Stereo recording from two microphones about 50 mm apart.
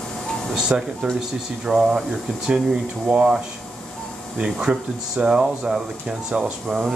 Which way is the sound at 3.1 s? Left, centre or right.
Right.